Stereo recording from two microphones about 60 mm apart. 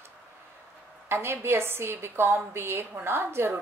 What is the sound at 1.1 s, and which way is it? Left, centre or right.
A woman's voice, right.